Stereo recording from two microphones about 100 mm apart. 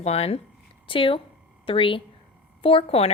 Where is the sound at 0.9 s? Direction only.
60° left (ahead or behind); by 3.1 s 85° left.